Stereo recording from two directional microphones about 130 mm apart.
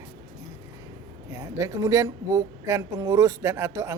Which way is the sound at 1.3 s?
25° right (ahead or behind).